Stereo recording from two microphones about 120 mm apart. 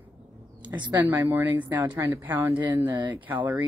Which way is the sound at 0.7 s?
40° right (ahead or behind).